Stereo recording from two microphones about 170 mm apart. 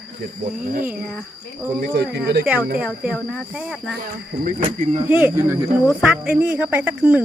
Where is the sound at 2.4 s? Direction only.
10° right (ahead or behind).